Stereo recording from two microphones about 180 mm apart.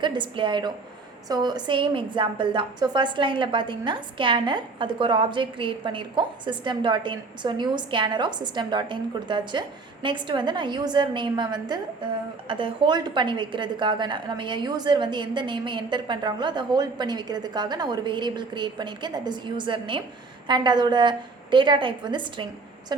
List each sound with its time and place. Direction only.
0.0 s a woman's voice: 25° right (ahead or behind)